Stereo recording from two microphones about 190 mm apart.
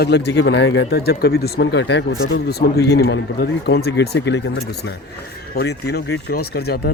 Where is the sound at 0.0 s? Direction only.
60° left (ahead or behind).